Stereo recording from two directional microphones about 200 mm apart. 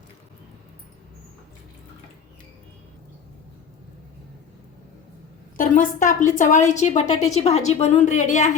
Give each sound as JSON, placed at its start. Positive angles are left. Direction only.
{"t": 5.5, "sound": "a woman's voice", "side_deg": 40}